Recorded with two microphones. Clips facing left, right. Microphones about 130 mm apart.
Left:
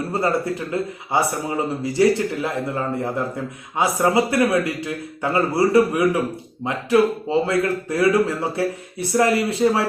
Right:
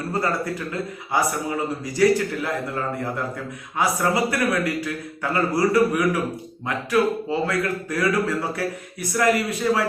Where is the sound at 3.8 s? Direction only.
25° left (ahead or behind).